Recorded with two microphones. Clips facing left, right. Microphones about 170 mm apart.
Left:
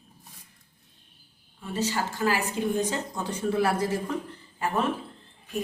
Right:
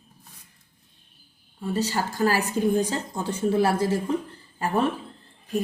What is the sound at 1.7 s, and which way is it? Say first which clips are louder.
Speech: right 2 dB; 35° right (ahead or behind).